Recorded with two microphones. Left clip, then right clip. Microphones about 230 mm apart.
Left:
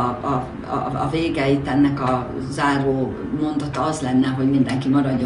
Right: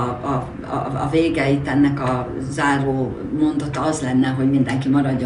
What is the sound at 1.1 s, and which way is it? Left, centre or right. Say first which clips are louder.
Speech: right 4 dB; left.